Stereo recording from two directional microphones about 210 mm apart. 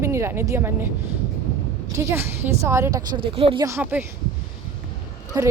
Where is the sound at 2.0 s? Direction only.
10° right (ahead or behind).